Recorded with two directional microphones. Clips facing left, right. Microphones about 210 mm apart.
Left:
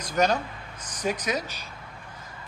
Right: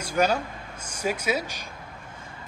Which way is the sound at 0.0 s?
10° right (ahead or behind).